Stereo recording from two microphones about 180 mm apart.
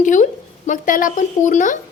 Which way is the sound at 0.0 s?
45° left (ahead or behind).